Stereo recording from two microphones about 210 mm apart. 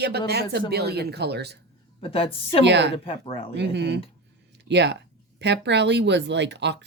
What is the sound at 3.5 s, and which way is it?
Speech, 55° right (ahead or behind).